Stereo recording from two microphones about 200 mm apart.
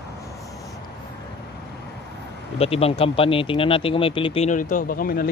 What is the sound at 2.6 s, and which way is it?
Speech, 30° left (ahead or behind).